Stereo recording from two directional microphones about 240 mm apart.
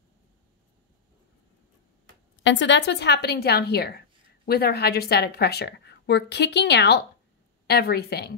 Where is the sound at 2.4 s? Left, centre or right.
Left.